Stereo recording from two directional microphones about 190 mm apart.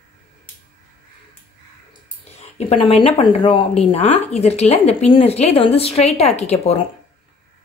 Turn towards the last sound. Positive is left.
turn(degrees=35)  # may be behind; listen again after turning